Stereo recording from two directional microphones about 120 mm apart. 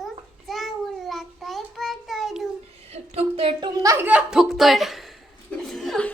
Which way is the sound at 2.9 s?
55° right (ahead or behind).